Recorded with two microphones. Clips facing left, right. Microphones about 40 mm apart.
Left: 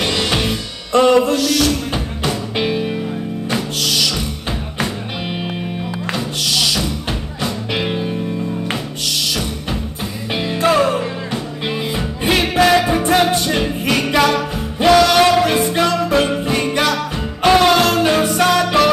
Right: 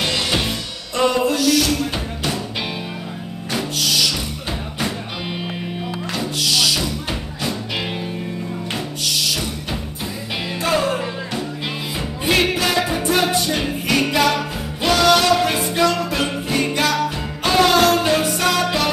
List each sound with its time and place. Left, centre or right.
0.2 s music: centre
0.5 s music: left
2.5 s music: centre
4.5 s music: left
6.7 s music: left
10.3 s music: left
12.2 s music: left